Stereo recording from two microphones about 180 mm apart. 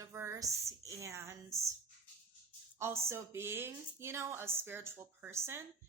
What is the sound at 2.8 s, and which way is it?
Speech, 15° right (ahead or behind).